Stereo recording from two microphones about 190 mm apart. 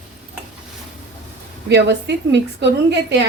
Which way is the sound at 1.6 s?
65° right (ahead or behind).